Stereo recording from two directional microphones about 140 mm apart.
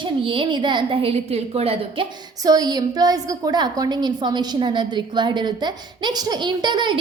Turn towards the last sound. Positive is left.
turn(degrees=-35)  # may be behind; listen again after turning